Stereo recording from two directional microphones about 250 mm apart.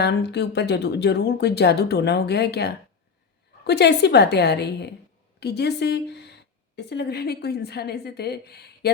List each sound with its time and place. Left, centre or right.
0.0 s speech: left